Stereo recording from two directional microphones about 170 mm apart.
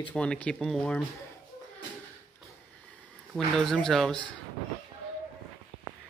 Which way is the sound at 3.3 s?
Centre (ahead or behind).